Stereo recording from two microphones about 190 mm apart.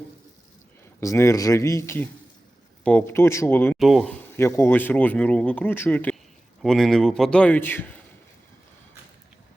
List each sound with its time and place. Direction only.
1.0 s speech: 15° left (ahead or behind)
3.8 s a man's voice: centre (ahead or behind)
4.4 s a man's voice: 15° left (ahead or behind)